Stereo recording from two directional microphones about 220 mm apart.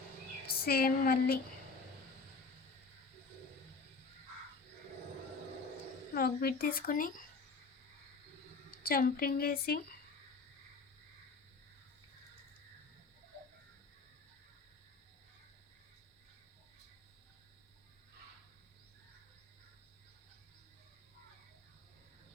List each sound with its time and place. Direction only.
0.4 s a sound: 45° left (ahead or behind)
6.1 s speech: 40° left (ahead or behind)
8.7 s a woman's voice: 40° left (ahead or behind)